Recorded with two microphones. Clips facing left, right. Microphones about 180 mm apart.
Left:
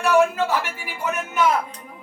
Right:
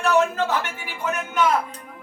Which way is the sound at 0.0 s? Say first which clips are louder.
Left 2 dB; 10° left (ahead or behind).